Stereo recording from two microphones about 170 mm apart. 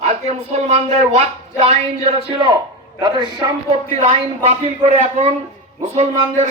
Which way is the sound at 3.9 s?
35° right (ahead or behind).